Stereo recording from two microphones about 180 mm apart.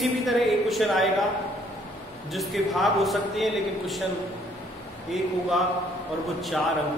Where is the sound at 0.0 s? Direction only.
Centre (ahead or behind).